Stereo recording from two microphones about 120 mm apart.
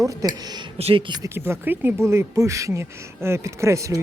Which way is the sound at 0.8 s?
45° right (ahead or behind).